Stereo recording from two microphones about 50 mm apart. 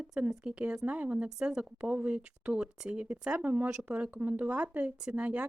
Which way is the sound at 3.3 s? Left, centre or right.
Right.